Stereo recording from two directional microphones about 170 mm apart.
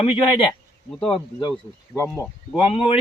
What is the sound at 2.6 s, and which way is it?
Speech, 35° left (ahead or behind).